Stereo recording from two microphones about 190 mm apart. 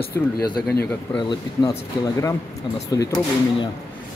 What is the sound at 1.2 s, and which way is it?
Speech, 20° left (ahead or behind).